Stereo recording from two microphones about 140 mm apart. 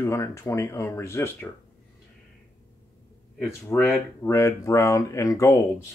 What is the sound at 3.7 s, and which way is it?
Speech, 15° left (ahead or behind).